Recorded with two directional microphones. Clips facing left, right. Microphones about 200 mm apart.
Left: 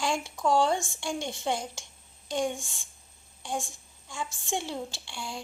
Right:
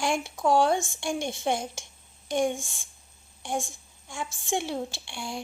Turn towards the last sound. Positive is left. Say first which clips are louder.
# right 3 dB
turn(degrees=-15)  # may be behind; listen again after turning